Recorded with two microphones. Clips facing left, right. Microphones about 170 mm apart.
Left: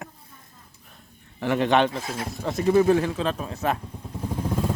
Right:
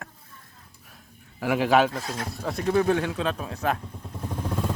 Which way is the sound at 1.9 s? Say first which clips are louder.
Left 1 dB; 10° left (ahead or behind).